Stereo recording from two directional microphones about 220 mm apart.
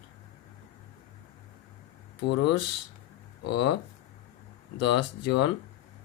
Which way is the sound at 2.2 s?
55° left (ahead or behind).